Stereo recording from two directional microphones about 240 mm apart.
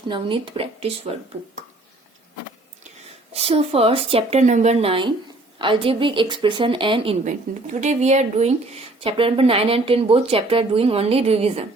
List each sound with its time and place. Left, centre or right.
0.1 s a woman's voice: right
3.3 s a woman's voice: right